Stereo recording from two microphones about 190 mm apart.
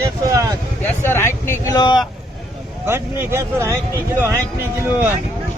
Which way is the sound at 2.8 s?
10° right (ahead or behind).